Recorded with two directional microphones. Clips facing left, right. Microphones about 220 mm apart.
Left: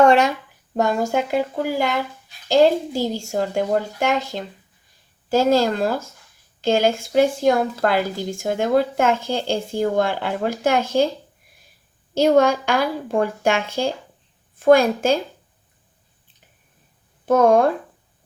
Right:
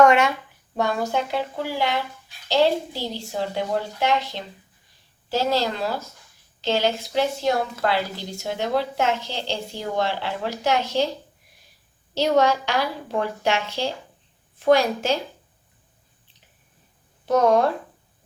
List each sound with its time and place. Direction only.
0.0 s speech: 30° left (ahead or behind)
0.8 s a woman's voice: 45° left (ahead or behind)
12.1 s a woman's voice: 50° left (ahead or behind)
17.2 s a woman's voice: 50° left (ahead or behind)